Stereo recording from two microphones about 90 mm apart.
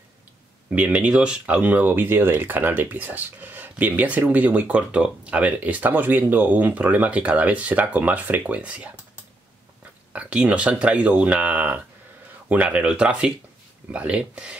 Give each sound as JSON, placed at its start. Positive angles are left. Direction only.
{"t": 0.7, "sound": "speech", "side_deg": -15}
{"t": 10.1, "sound": "speech", "side_deg": -15}